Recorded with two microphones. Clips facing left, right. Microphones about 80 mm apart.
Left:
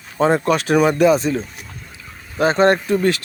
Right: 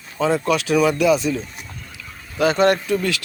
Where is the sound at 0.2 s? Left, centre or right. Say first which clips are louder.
Left 3 dB; left.